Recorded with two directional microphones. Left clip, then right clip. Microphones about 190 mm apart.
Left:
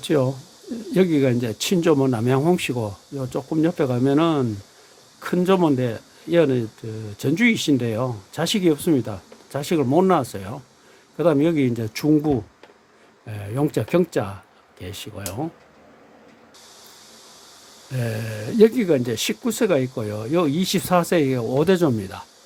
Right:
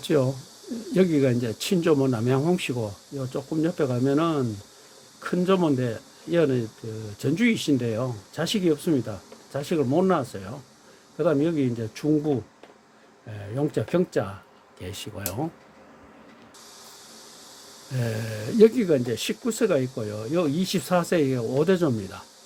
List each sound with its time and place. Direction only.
0.0 s speech: 10° left (ahead or behind)
17.9 s speech: 10° left (ahead or behind)